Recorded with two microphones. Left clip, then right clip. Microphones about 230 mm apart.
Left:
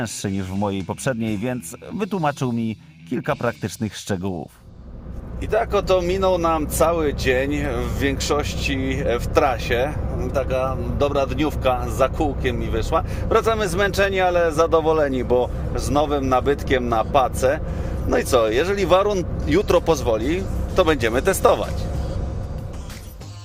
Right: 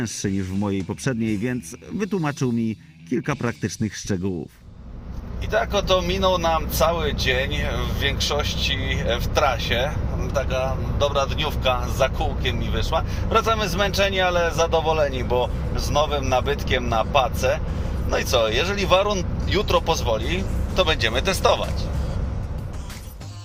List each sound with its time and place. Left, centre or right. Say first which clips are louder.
0.0 s speech: even; centre
5.5 s speech: left 2 dB; left